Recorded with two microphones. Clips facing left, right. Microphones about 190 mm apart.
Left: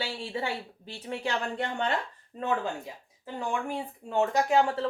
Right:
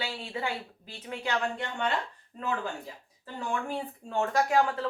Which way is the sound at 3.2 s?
15° left (ahead or behind).